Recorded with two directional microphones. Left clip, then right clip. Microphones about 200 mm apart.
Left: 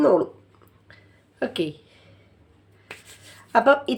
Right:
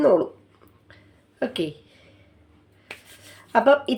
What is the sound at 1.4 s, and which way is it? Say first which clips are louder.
Speech: even; 5° left (ahead or behind).